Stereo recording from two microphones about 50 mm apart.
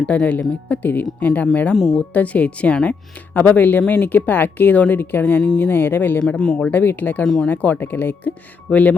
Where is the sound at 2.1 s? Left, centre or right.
Left.